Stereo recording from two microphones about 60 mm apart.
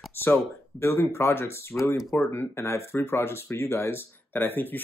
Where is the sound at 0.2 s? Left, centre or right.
Left.